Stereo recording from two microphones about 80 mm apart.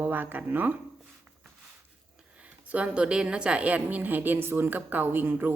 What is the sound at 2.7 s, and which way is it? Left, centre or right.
A woman's voice, centre.